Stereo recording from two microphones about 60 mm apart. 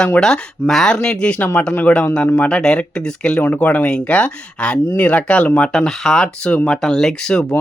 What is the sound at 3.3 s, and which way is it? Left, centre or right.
Speech, left.